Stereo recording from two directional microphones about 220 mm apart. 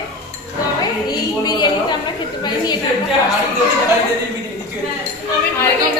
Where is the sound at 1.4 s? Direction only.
20° left (ahead or behind).